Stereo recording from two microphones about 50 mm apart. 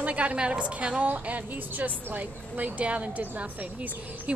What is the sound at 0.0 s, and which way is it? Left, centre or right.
A woman's voice, right.